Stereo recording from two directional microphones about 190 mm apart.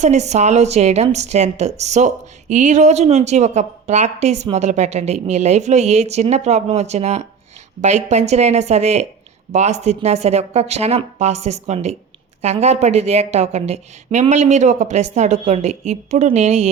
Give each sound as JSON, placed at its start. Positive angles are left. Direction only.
{"t": 0.0, "sound": "a woman's voice", "side_deg": -35}